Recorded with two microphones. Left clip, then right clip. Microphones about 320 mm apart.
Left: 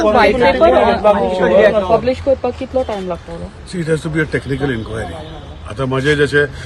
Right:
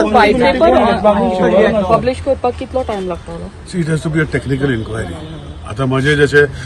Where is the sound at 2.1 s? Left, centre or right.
Right.